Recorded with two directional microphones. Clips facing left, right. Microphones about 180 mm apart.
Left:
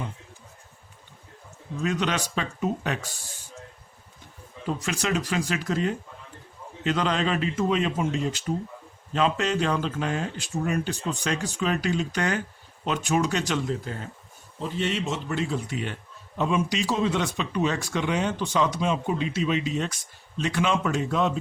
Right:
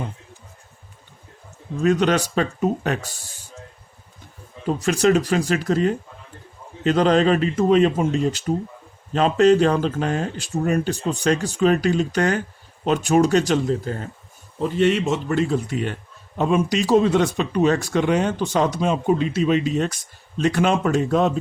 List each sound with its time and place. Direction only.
1.8 s speech: 45° right (ahead or behind)
4.6 s speech: 40° right (ahead or behind)
14.6 s speech: 55° right (ahead or behind)